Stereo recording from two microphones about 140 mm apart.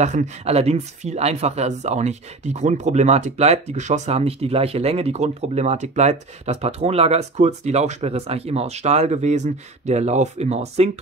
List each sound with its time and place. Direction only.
0.0 s speech: 55° right (ahead or behind)